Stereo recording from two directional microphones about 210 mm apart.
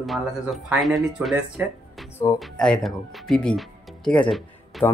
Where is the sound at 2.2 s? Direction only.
15° left (ahead or behind).